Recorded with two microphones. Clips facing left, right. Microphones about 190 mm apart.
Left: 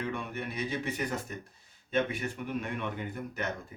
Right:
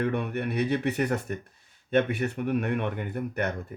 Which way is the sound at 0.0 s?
60° right (ahead or behind).